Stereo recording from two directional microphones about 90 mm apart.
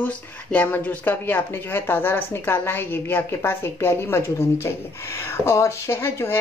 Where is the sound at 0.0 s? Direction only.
20° left (ahead or behind).